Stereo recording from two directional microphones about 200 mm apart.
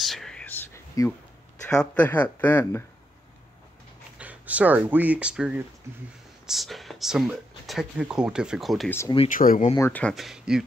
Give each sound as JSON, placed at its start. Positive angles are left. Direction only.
{"t": 0.0, "sound": "whispering", "side_deg": 0}
{"t": 1.7, "sound": "speech", "side_deg": 5}
{"t": 4.2, "sound": "speech", "side_deg": -5}
{"t": 9.3, "sound": "speech", "side_deg": 45}
{"t": 9.8, "sound": "speech", "side_deg": 10}